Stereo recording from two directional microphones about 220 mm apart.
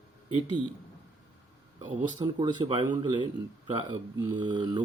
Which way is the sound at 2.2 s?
20° right (ahead or behind).